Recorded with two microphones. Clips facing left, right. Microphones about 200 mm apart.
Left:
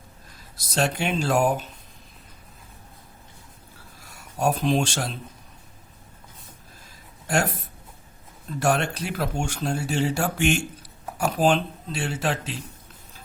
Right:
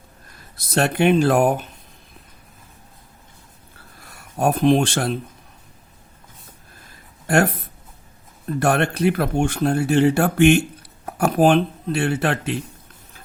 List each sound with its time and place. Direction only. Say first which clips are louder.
0.5 s speech: right 5 dB; 60° right (ahead or behind)
4.0 s speech: right 3 dB; 60° right (ahead or behind)
7.3 s speech: right 6 dB; 60° right (ahead or behind)